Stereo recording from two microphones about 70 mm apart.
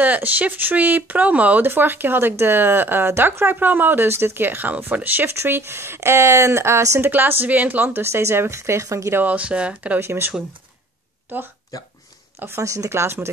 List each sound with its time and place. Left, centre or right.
0.0 s speech: right
7.1 s speech: right
9.2 s speech: right
9.9 s speech: right
12.4 s speech: right
12.6 s speech: right